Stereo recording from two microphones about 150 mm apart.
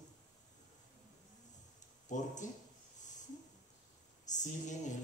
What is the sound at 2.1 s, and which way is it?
Speech, 55° left (ahead or behind).